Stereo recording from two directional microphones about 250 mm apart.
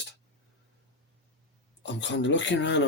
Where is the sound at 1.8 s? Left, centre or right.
Left.